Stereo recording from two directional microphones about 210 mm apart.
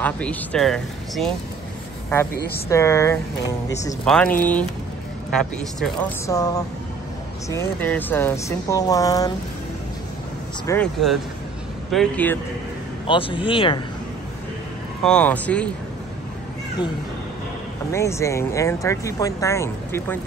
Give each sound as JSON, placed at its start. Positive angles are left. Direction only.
{"t": 0.0, "sound": "speech", "side_deg": 5}
{"t": 2.7, "sound": "speech", "side_deg": 15}
{"t": 6.2, "sound": "speech", "side_deg": 15}
{"t": 10.7, "sound": "speech", "side_deg": 5}
{"t": 13.0, "sound": "a man's voice", "side_deg": 25}
{"t": 15.0, "sound": "speech", "side_deg": 5}
{"t": 17.9, "sound": "speech", "side_deg": 15}